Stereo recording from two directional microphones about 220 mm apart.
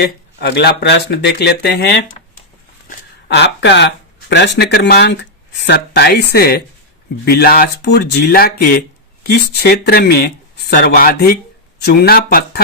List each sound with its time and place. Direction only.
0.0 s speech: 50° left (ahead or behind)
3.2 s speech: 50° left (ahead or behind)